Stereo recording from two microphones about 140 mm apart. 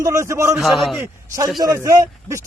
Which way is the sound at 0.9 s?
20° right (ahead or behind).